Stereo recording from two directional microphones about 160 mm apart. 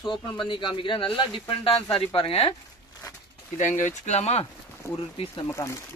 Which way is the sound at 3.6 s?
50° left (ahead or behind).